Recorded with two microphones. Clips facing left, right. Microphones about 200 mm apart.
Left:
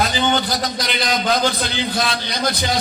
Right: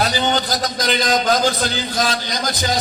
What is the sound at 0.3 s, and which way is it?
A man's voice, 45° right (ahead or behind).